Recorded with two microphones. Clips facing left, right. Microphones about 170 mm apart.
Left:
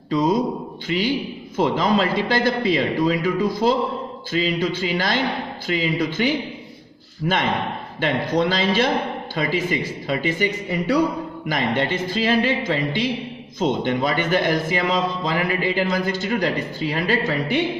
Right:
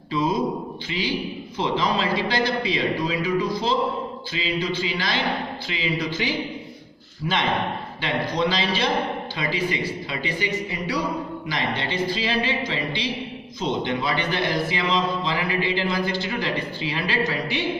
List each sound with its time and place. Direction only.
0.9 s a man's voice: 45° left (ahead or behind)
8.0 s a man's voice: 50° left (ahead or behind)